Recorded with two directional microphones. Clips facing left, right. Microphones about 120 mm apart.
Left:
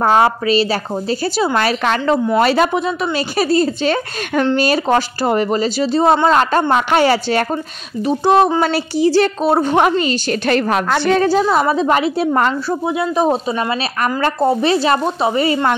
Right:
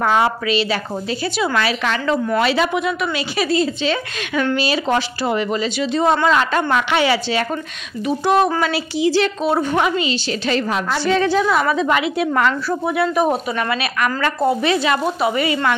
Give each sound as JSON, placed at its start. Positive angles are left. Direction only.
{"t": 0.0, "sound": "a woman's voice", "side_deg": 40}
{"t": 2.8, "sound": "a woman's voice", "side_deg": 35}
{"t": 8.0, "sound": "a woman's voice", "side_deg": 35}
{"t": 11.2, "sound": "a woman's voice", "side_deg": 35}
{"t": 12.6, "sound": "a woman's voice", "side_deg": 20}